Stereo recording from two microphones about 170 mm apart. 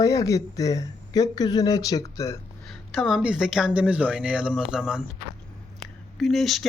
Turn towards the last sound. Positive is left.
turn(degrees=0)  # may be behind; listen again after turning